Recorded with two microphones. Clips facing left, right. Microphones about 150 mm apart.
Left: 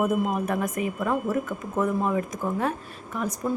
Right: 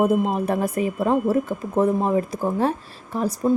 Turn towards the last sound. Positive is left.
turn(degrees=-30)  # may be behind; listen again after turning